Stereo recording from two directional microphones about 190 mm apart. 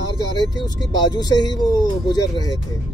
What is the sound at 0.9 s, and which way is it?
Speech, 20° left (ahead or behind).